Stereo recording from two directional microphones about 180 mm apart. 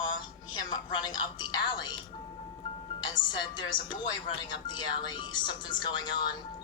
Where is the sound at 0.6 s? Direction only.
25° left (ahead or behind).